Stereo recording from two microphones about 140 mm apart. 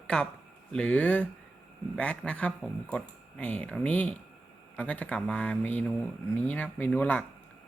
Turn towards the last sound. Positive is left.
turn(degrees=10)  # may be behind; listen again after turning